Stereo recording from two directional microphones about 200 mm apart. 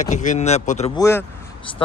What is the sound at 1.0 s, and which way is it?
Speech, 15° left (ahead or behind).